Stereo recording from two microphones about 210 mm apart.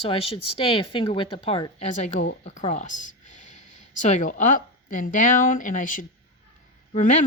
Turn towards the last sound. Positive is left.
turn(degrees=35)  # may be behind; listen again after turning